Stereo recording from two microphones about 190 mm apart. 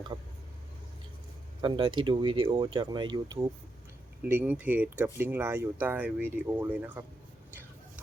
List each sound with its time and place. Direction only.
1.6 s speech: 25° right (ahead or behind); by 7.0 s 10° right (ahead or behind)